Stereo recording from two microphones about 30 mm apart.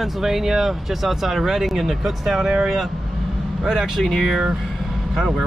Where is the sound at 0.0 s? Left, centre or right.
Centre.